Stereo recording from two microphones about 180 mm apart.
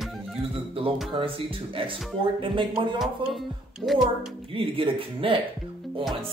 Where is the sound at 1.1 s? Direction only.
30° right (ahead or behind).